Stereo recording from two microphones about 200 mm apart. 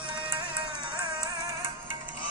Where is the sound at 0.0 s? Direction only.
25° right (ahead or behind).